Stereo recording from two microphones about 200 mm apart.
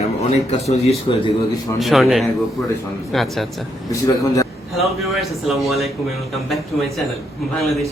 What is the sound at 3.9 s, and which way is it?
Speech, 15° left (ahead or behind).